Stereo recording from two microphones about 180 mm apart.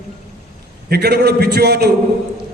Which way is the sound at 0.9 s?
65° right (ahead or behind).